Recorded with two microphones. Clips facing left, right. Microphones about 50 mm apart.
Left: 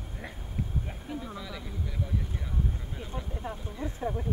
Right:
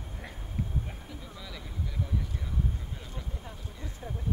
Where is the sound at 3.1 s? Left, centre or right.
Left.